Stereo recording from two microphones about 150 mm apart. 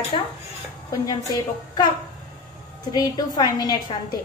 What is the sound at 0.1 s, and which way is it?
Speech, 35° left (ahead or behind).